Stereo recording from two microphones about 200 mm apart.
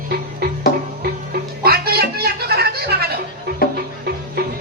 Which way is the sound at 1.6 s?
50° right (ahead or behind).